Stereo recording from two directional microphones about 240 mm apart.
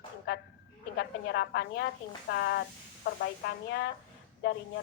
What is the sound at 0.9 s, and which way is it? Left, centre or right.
A woman's voice, left.